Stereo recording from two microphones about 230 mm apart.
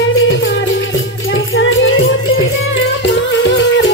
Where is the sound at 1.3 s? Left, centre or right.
Left.